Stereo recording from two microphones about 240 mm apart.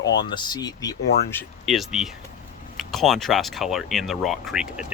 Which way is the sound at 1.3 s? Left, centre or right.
Centre.